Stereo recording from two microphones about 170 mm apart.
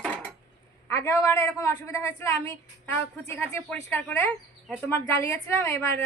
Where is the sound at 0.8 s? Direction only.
15° left (ahead or behind).